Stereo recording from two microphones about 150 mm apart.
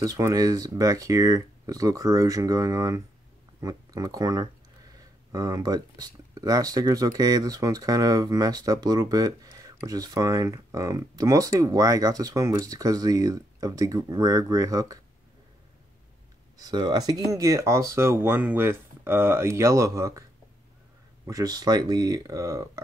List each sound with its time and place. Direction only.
0.0 s speech: 25° right (ahead or behind)
16.5 s speech: 25° right (ahead or behind)
21.3 s speech: 25° right (ahead or behind)